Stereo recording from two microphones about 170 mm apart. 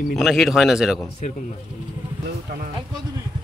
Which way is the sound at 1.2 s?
45° left (ahead or behind).